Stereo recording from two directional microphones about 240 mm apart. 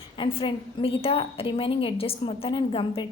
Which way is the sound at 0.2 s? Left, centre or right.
Left.